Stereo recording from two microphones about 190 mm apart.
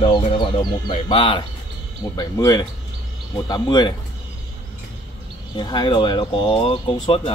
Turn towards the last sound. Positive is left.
turn(degrees=25)  # may be behind; listen again after turning